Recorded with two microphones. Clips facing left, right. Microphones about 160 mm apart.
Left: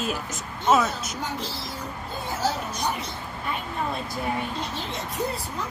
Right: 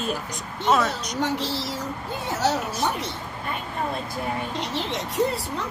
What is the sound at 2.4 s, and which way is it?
Speech, 75° right (ahead or behind).